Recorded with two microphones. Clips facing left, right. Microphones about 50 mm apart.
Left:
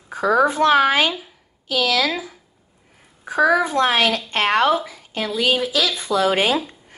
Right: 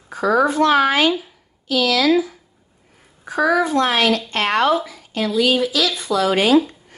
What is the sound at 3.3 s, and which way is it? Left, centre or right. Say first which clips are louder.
A woman's voice: even; centre.